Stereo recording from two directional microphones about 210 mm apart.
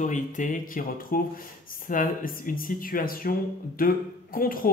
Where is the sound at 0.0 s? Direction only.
35° left (ahead or behind).